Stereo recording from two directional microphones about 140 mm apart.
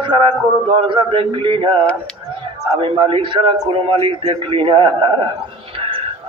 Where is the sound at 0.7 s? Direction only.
35° right (ahead or behind).